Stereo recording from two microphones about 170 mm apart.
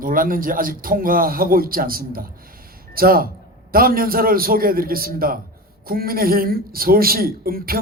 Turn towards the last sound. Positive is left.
turn(degrees=-60)  # may be behind; listen again after turning